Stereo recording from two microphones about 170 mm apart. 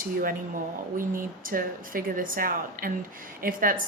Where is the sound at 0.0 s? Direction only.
55° right (ahead or behind).